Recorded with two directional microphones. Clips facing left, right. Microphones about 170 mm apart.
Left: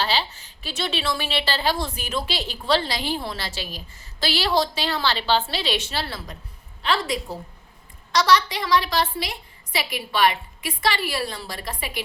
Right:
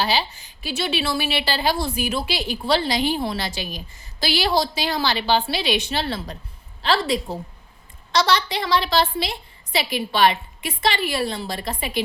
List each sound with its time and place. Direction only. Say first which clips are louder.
0.0 s a woman's voice: right 2 dB; 15° right (ahead or behind)